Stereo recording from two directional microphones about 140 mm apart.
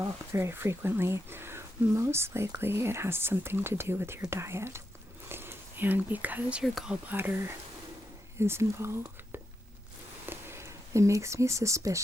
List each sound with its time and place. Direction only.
0.0 s speech: 20° right (ahead or behind)